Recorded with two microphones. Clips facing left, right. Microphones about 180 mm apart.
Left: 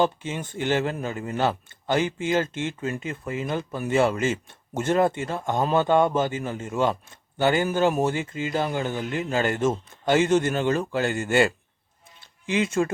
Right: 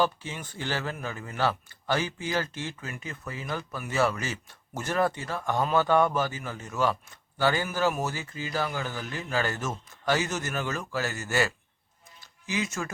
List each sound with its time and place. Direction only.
0.0 s speech: 20° left (ahead or behind)
12.2 s music: 25° left (ahead or behind)